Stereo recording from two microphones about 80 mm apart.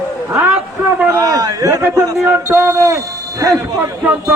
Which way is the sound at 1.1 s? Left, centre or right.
Right.